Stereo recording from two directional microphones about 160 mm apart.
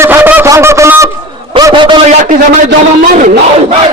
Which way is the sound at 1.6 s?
30° right (ahead or behind).